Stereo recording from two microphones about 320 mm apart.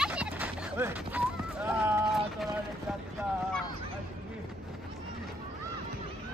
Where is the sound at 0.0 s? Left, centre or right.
Centre.